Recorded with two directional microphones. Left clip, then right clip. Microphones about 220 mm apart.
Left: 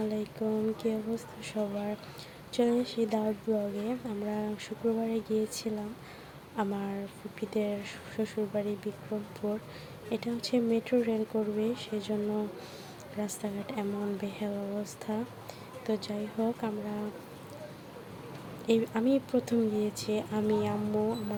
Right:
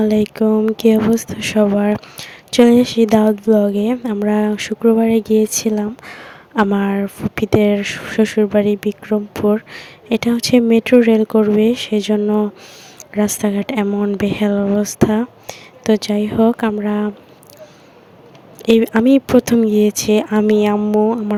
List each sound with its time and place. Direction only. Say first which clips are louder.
0.0 s speech: right 18 dB; 45° right (ahead or behind)
18.6 s speech: right 16 dB; 45° right (ahead or behind)